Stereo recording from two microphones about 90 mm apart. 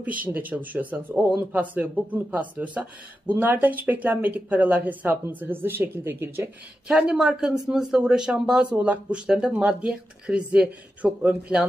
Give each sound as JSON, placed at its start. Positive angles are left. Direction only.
{"t": 0.0, "sound": "speech", "side_deg": -15}
{"t": 6.9, "sound": "speech", "side_deg": -10}